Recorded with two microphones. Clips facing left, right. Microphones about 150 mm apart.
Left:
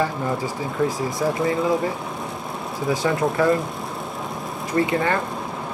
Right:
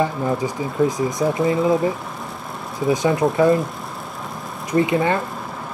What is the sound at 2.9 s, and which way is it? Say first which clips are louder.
Speech: right 4 dB; 20° right (ahead or behind).